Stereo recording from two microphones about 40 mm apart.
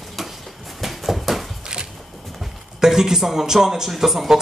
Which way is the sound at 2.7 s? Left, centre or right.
Centre.